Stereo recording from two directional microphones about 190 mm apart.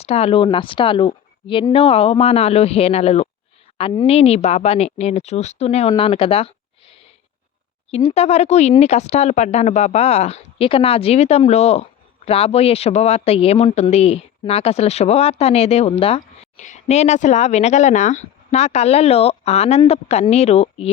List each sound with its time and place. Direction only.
0.0 s speech: 30° left (ahead or behind)
5.9 s a sound: 30° left (ahead or behind)
7.9 s speech: 35° left (ahead or behind)